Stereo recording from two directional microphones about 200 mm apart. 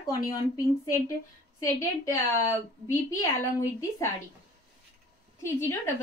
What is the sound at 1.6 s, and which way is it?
A woman's voice, 15° left (ahead or behind).